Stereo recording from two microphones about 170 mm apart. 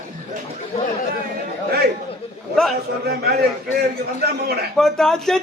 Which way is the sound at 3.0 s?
70° right (ahead or behind).